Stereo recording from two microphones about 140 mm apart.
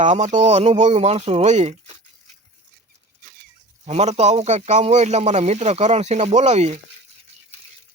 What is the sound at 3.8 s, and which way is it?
Speech, 55° right (ahead or behind).